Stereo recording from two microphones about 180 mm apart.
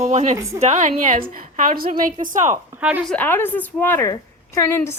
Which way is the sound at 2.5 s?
10° right (ahead or behind).